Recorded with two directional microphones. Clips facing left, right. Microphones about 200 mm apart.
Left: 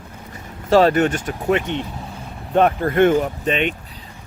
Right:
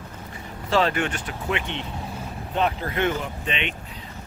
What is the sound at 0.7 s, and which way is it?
A man's voice, 45° left (ahead or behind).